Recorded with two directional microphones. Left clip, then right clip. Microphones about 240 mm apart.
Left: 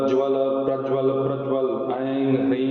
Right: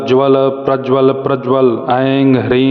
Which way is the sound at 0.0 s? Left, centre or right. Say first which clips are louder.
Right 10 dB; right.